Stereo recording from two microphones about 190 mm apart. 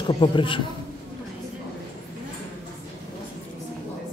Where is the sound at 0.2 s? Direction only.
25° left (ahead or behind).